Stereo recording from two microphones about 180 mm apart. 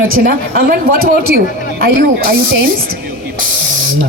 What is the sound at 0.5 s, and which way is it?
Speech, 55° right (ahead or behind).